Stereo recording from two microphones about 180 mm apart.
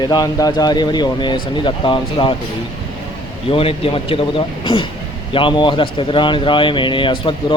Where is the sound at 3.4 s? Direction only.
30° left (ahead or behind).